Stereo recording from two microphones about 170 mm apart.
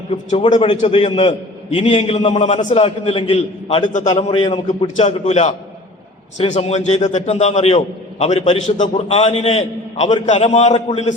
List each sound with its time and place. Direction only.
0.1 s a man's voice: 35° left (ahead or behind)
3.8 s a man's voice: 50° left (ahead or behind)
4.2 s a man's voice: 30° left (ahead or behind)
4.9 s a man's voice: 40° left (ahead or behind)